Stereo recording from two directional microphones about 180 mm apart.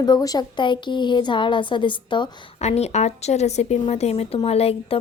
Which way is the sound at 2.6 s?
35° left (ahead or behind).